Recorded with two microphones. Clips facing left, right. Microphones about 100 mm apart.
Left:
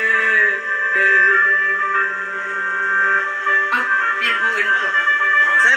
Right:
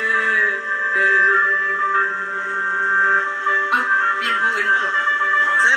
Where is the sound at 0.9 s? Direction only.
20° right (ahead or behind).